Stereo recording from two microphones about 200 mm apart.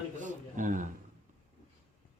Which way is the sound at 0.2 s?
40° right (ahead or behind).